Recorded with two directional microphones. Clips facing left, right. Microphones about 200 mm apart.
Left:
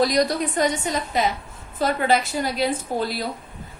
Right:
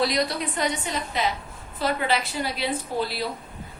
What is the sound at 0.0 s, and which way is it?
A woman's voice, 45° left (ahead or behind).